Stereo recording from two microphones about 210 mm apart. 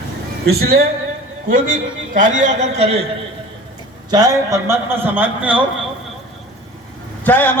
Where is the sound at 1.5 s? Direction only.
40° right (ahead or behind).